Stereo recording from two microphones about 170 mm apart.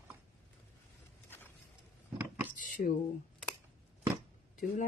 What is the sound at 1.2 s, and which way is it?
Vehicle, 10° left (ahead or behind).